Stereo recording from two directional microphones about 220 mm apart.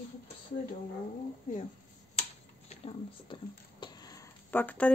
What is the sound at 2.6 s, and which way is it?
Speech, 25° left (ahead or behind).